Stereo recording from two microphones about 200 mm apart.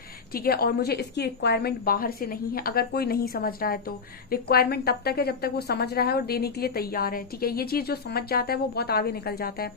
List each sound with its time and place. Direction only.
0.3 s a woman's voice: 50° left (ahead or behind)